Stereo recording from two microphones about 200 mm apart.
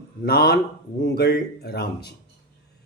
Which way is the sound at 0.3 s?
55° left (ahead or behind).